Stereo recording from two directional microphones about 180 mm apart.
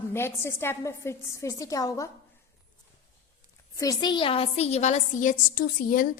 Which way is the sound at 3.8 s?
20° left (ahead or behind).